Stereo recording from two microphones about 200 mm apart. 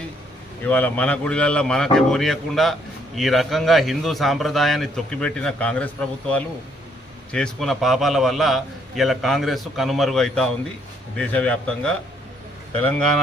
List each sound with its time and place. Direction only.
0.6 s a man's voice: 10° left (ahead or behind)